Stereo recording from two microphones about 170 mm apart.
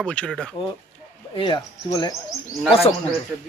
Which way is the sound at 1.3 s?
30° left (ahead or behind).